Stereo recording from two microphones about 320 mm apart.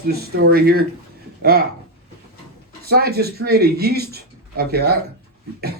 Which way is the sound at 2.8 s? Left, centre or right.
Right.